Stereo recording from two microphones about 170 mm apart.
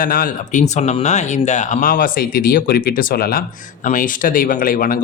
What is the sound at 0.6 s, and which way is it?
Speech, 40° left (ahead or behind).